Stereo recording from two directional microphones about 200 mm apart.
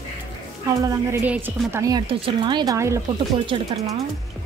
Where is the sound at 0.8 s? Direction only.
15° right (ahead or behind).